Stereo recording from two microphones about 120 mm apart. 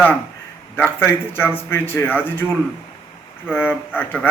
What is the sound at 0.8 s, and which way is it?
A man's voice, 20° left (ahead or behind).